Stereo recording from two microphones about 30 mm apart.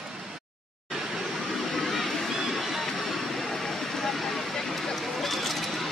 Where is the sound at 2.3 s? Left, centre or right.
Centre.